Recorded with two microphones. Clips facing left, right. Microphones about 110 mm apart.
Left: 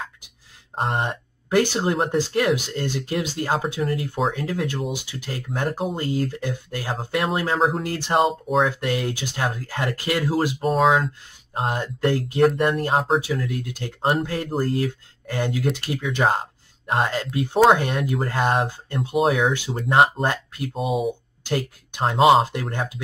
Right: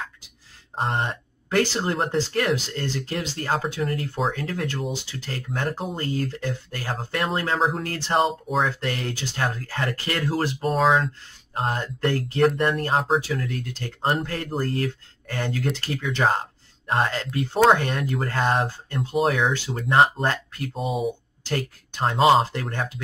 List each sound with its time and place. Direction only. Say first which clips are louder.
1.0 s speech: left 2 dB; 15° left (ahead or behind)
7.8 s speech: left 3 dB; 15° left (ahead or behind)
8.1 s speech: left 2 dB; centre (ahead or behind)
13.6 s speech: left 2 dB; 15° left (ahead or behind)
17.9 s speech: left 2 dB; 5° left (ahead or behind)
19.5 s speech: left 2 dB; 15° left (ahead or behind)
19.9 s speech: left 1 dB; 5° left (ahead or behind)
20.2 s speech: left 1 dB; 15° left (ahead or behind)
20.7 s speech: left 2 dB; centre (ahead or behind)
21.5 s speech: left 2 dB; 15° left (ahead or behind)